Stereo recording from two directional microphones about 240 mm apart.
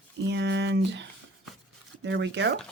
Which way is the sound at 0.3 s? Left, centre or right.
Right.